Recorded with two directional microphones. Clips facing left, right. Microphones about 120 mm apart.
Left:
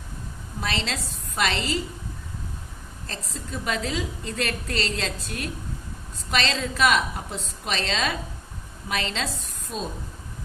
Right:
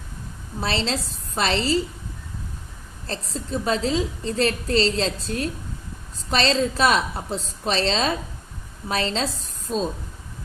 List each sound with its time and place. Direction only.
0.6 s a woman's voice: 30° right (ahead or behind)
3.1 s a woman's voice: 30° right (ahead or behind)